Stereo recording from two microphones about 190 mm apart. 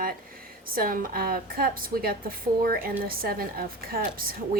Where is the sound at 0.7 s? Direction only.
50° right (ahead or behind).